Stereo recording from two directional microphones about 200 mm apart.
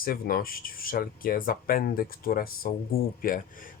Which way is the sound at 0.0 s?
45° left (ahead or behind).